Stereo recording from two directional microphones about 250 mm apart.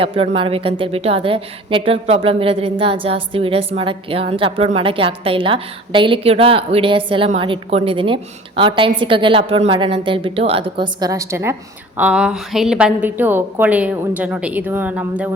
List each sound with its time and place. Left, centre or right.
0.0 s a woman's voice: right; by 15.3 s centre